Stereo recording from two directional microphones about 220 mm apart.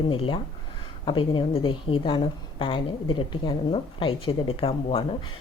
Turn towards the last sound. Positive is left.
turn(degrees=25)  # may be behind; listen again after turning